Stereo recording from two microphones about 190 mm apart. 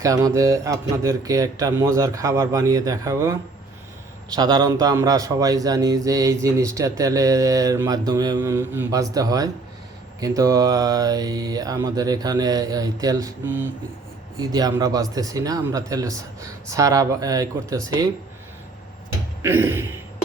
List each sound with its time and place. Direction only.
0.0 s speech: 15° right (ahead or behind)
4.4 s speech: 20° right (ahead or behind)
10.2 s mantra: 15° right (ahead or behind)
16.7 s speech: 15° right (ahead or behind)
19.4 s speech: 10° right (ahead or behind)